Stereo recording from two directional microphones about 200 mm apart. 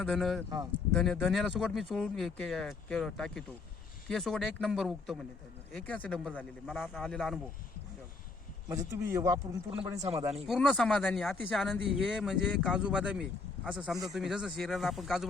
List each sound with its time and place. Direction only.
0.0 s speech: centre (ahead or behind)
8.7 s speech: 15° right (ahead or behind)
10.3 s speech: centre (ahead or behind)